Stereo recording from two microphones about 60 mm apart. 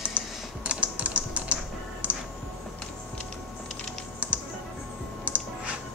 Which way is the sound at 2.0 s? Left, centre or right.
Right.